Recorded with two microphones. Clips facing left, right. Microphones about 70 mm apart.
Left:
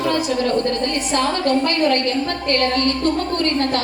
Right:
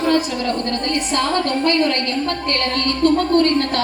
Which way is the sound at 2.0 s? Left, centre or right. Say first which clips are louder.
Left 1 dB; right.